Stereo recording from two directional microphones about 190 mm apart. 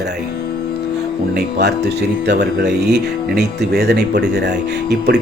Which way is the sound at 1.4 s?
60° right (ahead or behind).